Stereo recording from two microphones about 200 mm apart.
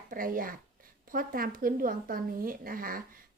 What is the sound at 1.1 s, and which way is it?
Speech, 45° right (ahead or behind).